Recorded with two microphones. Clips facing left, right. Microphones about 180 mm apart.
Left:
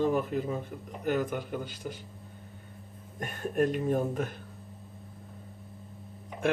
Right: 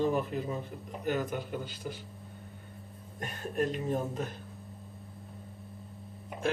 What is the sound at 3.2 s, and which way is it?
Speech, 50° left (ahead or behind).